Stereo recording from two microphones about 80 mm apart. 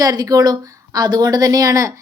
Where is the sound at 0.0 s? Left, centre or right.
Right.